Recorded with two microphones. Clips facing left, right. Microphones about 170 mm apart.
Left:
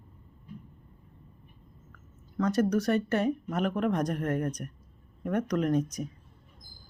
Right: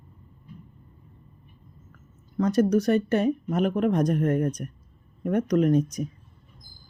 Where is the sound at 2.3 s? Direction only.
20° right (ahead or behind).